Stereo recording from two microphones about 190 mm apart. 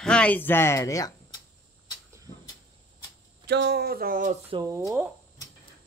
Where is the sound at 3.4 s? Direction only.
60° right (ahead or behind); by 4.3 s 45° right (ahead or behind).